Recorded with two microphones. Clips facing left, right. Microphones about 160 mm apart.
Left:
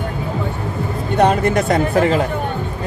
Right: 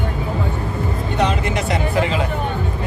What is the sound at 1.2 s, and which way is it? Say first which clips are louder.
Speech: left 6 dB; 50° left (ahead or behind).